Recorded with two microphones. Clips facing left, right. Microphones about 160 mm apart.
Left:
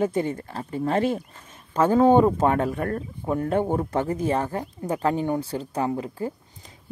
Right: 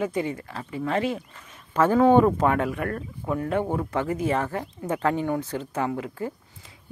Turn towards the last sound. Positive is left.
turn(degrees=30)  # may be behind; listen again after turning